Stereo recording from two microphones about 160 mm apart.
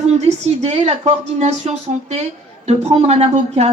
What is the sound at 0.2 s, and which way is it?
A woman's voice, 45° right (ahead or behind).